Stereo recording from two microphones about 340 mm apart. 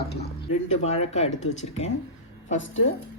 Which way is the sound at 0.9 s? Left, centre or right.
Centre.